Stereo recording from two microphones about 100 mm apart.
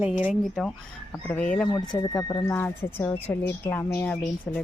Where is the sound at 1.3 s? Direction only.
10° left (ahead or behind).